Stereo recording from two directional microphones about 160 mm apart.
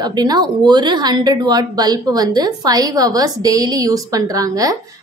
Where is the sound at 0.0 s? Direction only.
25° right (ahead or behind).